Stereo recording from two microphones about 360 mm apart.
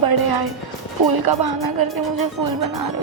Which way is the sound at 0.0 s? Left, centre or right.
Right.